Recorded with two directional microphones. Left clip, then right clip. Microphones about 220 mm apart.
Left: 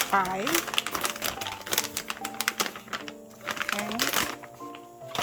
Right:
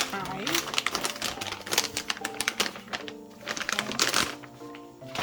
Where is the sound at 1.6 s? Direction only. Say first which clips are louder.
Right 3 dB; centre (ahead or behind).